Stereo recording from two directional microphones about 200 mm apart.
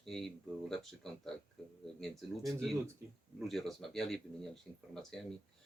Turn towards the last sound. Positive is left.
turn(degrees=5)  # may be behind; listen again after turning